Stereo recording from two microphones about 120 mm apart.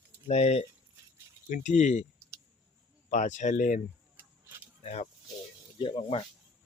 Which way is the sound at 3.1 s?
90° left.